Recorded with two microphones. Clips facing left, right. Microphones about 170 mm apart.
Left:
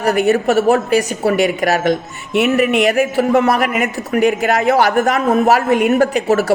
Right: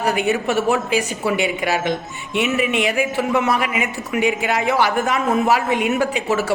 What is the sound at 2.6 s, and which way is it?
A man's voice, 40° left (ahead or behind).